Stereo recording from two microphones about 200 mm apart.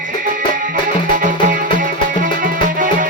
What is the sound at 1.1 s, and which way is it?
Music, 40° right (ahead or behind).